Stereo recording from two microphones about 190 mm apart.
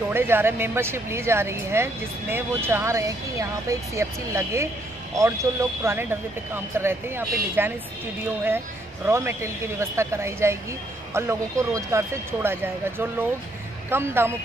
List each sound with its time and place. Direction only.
0.1 s speech: 10° right (ahead or behind)
9.0 s speech: 10° right (ahead or behind)